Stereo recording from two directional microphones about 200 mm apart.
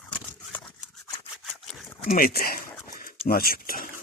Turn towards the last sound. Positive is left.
turn(degrees=45)  # may be behind; listen again after turning